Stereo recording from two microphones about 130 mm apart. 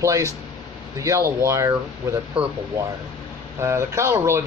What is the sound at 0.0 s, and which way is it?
A man's voice, 25° right (ahead or behind).